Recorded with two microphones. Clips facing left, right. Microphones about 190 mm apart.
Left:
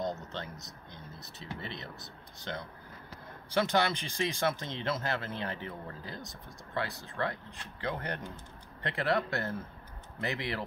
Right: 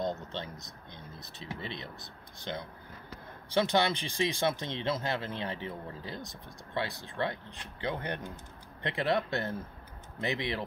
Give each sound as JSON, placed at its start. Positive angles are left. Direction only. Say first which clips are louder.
{"t": 1.4, "sound": "speech", "louder": "right 1 dB", "side_deg": -15}